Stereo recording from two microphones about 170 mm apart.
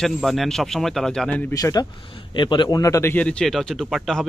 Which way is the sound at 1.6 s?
20° left (ahead or behind).